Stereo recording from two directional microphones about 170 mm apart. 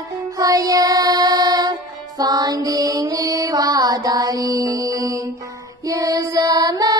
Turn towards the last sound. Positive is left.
turn(degrees=-20)  # may be behind; listen again after turning